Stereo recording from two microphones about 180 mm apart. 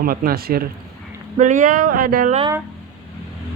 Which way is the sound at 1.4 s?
45° right (ahead or behind).